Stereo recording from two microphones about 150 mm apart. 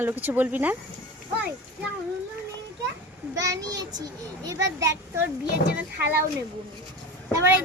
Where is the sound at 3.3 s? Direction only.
25° right (ahead or behind).